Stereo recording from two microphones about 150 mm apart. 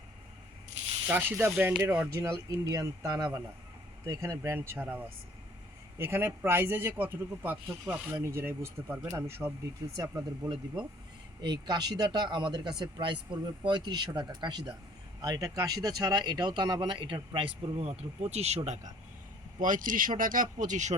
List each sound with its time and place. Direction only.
1.0 s a man's voice: 15° right (ahead or behind)
11.4 s speech: 30° right (ahead or behind); by 18.9 s 50° right (ahead or behind)
19.5 s speech: 65° right (ahead or behind)